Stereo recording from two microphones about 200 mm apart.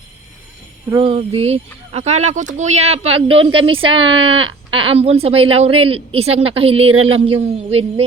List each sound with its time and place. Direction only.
0.9 s a man's voice: 25° right (ahead or behind)